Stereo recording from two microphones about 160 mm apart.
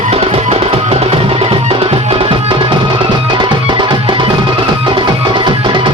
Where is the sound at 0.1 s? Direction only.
40° right (ahead or behind).